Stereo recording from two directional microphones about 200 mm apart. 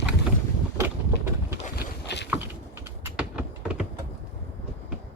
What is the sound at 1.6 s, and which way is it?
Boat, 55° left (ahead or behind).